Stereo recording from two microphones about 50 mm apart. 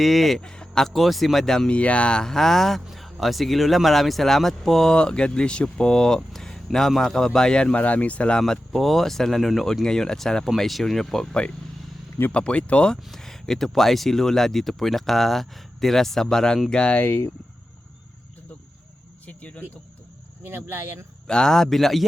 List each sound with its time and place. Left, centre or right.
0.0 s speech: centre
0.4 s speech: centre
0.9 s speech: centre
1.7 s speech: left
2.2 s speech: centre; by 8.4 s left
8.4 s speech: centre
9.8 s speech: centre
12.3 s speech: left
13.0 s speech: centre; by 17.1 s left
19.2 s cricket: left
20.4 s speech: right
21.2 s speech: centre